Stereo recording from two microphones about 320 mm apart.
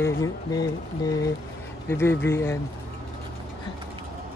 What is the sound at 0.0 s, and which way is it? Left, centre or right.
Speech, centre.